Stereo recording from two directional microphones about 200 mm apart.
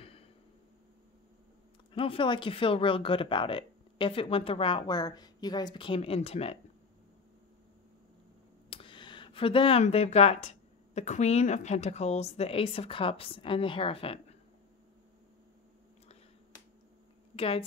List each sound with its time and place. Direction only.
2.0 s speech: 25° left (ahead or behind)
8.6 s a sound: 25° left (ahead or behind)
11.0 s speech: 35° left (ahead or behind)
17.4 s a woman's voice: 30° left (ahead or behind)